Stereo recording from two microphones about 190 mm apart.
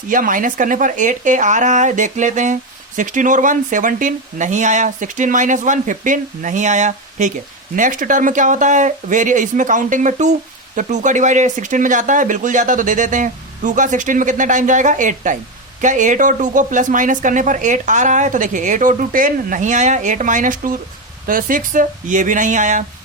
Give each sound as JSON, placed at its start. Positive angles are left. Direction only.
{"t": 0.1, "sound": "speech", "side_deg": -45}